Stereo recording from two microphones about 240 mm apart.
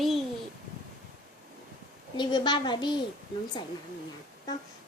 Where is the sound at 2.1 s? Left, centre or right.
Centre.